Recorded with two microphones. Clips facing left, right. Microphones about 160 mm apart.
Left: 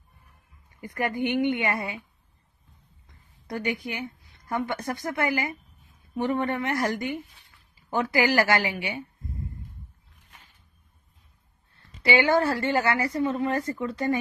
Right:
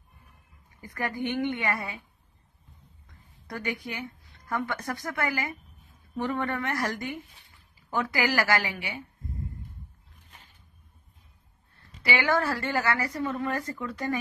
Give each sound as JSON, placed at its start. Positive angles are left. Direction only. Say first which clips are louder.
{"t": 0.9, "sound": "a woman's voice", "louder": "left 4 dB", "side_deg": 20}
{"t": 3.4, "sound": "a woman's voice", "louder": "left 4 dB", "side_deg": 20}
{"t": 12.0, "sound": "a woman's voice", "louder": "left 5 dB", "side_deg": 25}